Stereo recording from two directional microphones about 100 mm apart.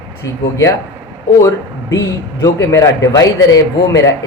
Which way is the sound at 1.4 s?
35° left (ahead or behind).